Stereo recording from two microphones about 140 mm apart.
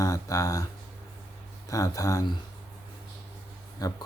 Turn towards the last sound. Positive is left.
turn(degrees=25)  # may be behind; listen again after turning